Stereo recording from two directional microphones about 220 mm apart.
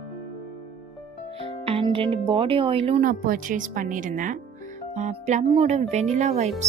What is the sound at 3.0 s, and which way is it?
A woman's voice, 40° right (ahead or behind).